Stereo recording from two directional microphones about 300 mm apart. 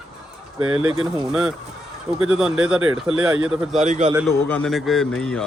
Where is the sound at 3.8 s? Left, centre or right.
Right.